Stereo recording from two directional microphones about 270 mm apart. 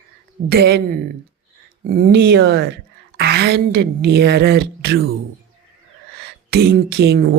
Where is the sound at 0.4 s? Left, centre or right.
Right.